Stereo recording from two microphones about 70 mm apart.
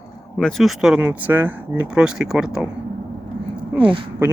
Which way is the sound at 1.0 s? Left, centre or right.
Right.